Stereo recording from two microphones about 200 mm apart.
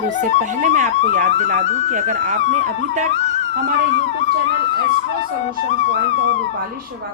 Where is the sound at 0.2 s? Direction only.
40° right (ahead or behind).